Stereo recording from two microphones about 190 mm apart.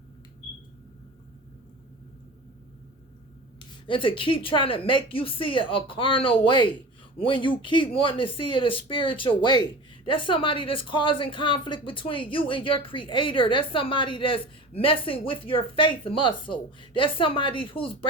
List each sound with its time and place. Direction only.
3.8 s speech: 25° left (ahead or behind)